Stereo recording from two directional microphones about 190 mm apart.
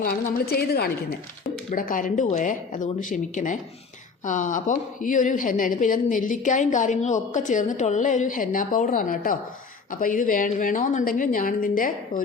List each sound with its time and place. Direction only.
0.0 s a woman's voice: 55° left (ahead or behind)